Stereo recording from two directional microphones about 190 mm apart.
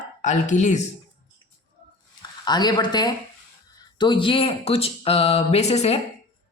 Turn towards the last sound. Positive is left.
turn(degrees=35)  # may be behind; listen again after turning